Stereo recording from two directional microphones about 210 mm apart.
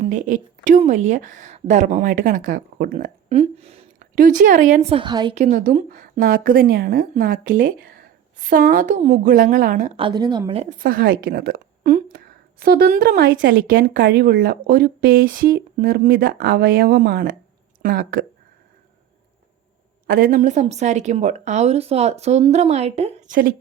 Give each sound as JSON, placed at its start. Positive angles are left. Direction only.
{"t": 0.0, "sound": "a woman's voice", "side_deg": -40}
{"t": 4.1, "sound": "a woman's voice", "side_deg": -40}
{"t": 5.4, "sound": "a woman's voice", "side_deg": -40}
{"t": 10.0, "sound": "a woman's voice", "side_deg": -20}
{"t": 10.8, "sound": "a woman's voice", "side_deg": -45}
{"t": 20.1, "sound": "a woman's voice", "side_deg": -40}